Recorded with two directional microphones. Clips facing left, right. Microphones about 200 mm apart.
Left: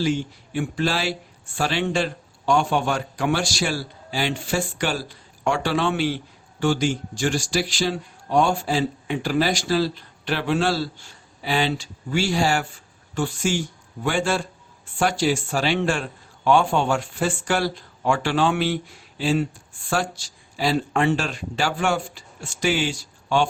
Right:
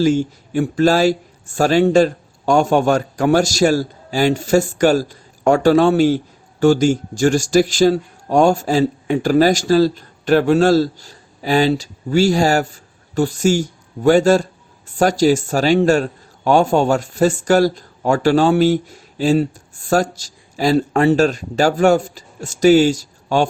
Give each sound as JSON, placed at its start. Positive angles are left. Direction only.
{"t": 0.0, "sound": "a man's voice", "side_deg": -40}